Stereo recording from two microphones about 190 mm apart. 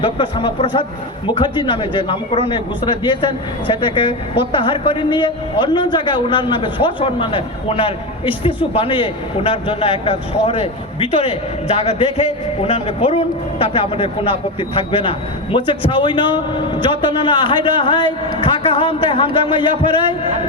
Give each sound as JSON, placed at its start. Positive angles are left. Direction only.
{"t": 0.0, "sound": "a man's voice", "side_deg": 25}